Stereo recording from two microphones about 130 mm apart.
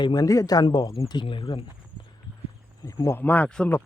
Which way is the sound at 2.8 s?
20° left (ahead or behind).